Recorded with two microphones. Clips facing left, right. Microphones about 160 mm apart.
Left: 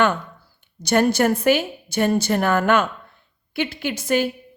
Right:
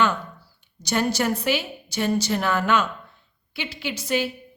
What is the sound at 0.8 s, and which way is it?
A woman's voice, 55° left (ahead or behind).